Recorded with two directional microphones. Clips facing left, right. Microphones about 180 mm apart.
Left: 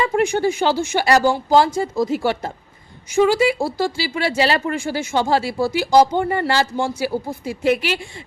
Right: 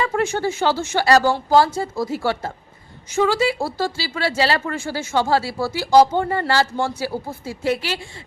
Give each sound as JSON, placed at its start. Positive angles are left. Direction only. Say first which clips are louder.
{"t": 0.0, "sound": "speech", "louder": "left 3 dB", "side_deg": 15}